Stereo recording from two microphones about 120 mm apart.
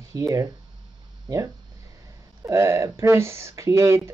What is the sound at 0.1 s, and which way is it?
Speech, 25° right (ahead or behind).